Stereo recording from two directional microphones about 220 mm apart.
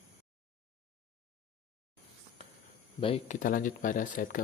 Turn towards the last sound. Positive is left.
turn(degrees=35)  # may be behind; listen again after turning